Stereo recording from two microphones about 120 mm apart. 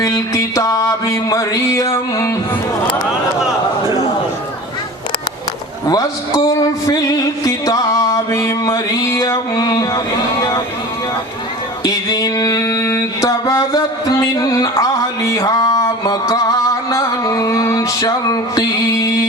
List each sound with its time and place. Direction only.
0.0 s music: 25° left (ahead or behind)
5.9 s speech: 30° left (ahead or behind)
6.6 s music: 30° left (ahead or behind)
9.6 s speech: 30° left (ahead or behind)
11.8 s mantra: 30° left (ahead or behind)